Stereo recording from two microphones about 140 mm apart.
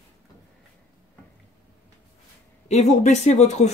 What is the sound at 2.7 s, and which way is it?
Speech, 55° left (ahead or behind).